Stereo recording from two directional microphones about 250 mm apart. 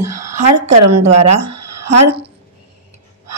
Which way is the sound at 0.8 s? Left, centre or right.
Right.